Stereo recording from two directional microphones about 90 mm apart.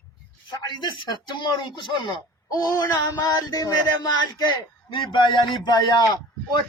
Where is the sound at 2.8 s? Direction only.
45° left (ahead or behind).